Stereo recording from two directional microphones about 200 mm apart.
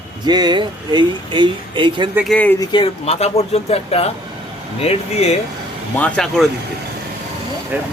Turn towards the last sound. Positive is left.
turn(degrees=-10)  # may be behind; listen again after turning